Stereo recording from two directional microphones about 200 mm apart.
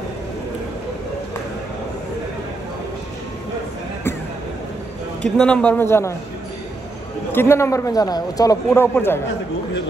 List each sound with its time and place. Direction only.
5.2 s a man's voice: 5° left (ahead or behind)
7.3 s a man's voice: 10° left (ahead or behind)